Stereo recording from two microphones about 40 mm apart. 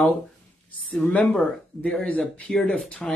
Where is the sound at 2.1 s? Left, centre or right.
Left.